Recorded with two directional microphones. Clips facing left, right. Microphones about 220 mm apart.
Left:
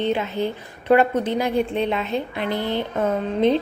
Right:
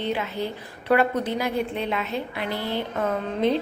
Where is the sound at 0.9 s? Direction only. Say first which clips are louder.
Left 4 dB; 25° left (ahead or behind).